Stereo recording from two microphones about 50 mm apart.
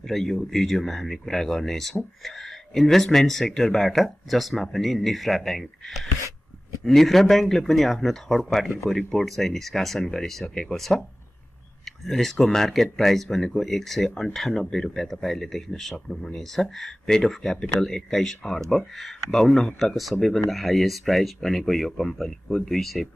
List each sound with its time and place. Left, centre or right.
0.1 s speech: centre
11.8 s speech: centre
19.9 s speech: centre